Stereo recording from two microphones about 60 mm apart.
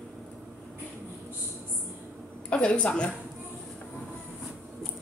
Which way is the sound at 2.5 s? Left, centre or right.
Centre.